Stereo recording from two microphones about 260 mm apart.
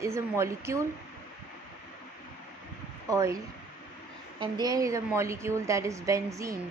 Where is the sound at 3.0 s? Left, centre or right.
Centre.